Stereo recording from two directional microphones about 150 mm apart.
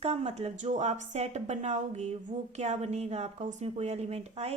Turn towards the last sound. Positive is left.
turn(degrees=-45)  # may be behind; listen again after turning